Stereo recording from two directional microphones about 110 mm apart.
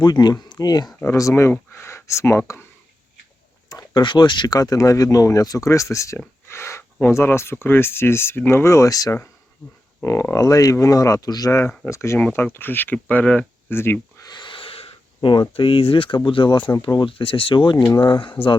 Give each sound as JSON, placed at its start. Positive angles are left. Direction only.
{"t": 0.0, "sound": "speech", "side_deg": 40}
{"t": 1.0, "sound": "speech", "side_deg": 25}
{"t": 3.7, "sound": "speech", "side_deg": 35}
{"t": 14.3, "sound": "speech", "side_deg": 45}